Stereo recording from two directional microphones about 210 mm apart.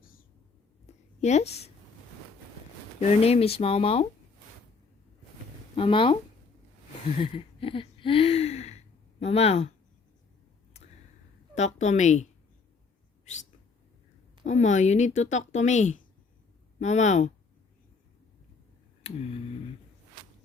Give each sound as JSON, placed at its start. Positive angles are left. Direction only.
{"t": 0.0, "sound": "whispering", "side_deg": 45}
{"t": 0.9, "sound": "a sound", "side_deg": 30}
{"t": 1.2, "sound": "speech", "side_deg": 30}
{"t": 3.2, "sound": "speech", "side_deg": 30}
{"t": 5.7, "sound": "speech", "side_deg": 25}
{"t": 7.2, "sound": "a sound", "side_deg": 25}
{"t": 9.2, "sound": "speech", "side_deg": 30}
{"t": 11.5, "sound": "speech", "side_deg": 35}
{"t": 13.2, "sound": "bird", "side_deg": 35}
{"t": 14.4, "sound": "speech", "side_deg": 35}
{"t": 19.0, "sound": "speech", "side_deg": 30}